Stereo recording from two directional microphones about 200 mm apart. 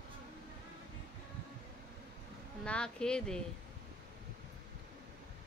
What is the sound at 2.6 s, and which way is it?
Speech, 5° left (ahead or behind).